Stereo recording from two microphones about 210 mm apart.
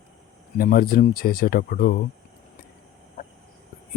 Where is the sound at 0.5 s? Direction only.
40° left (ahead or behind).